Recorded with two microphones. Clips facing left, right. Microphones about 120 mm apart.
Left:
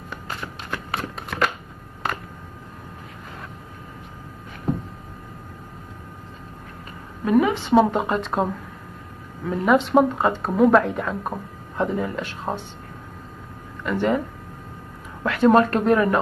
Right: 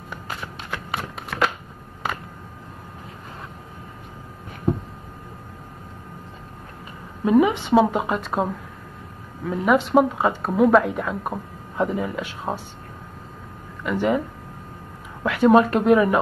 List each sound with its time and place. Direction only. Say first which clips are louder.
0.1 s shuffling cards: even; 10° right (ahead or behind)
7.2 s speech: right 2 dB; 20° right (ahead or behind)
7.7 s speech: left 2 dB; 5° right (ahead or behind)
9.5 s speech: even; 5° right (ahead or behind)
13.8 s speech: even; 10° right (ahead or behind)
15.2 s speech: right 1 dB; 10° right (ahead or behind)